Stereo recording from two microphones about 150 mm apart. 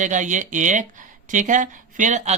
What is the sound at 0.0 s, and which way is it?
Speech, 55° right (ahead or behind).